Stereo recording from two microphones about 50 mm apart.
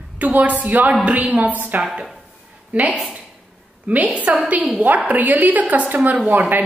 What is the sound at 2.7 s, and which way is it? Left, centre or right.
A woman's voice, right.